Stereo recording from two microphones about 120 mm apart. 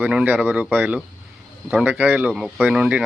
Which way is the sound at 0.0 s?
10° right (ahead or behind).